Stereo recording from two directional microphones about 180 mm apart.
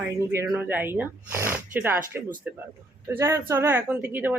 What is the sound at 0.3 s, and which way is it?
Speech, 10° right (ahead or behind).